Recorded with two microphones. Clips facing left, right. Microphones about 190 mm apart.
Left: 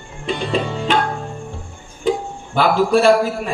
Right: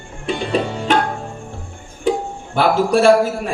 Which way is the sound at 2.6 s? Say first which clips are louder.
Even; 55° right (ahead or behind).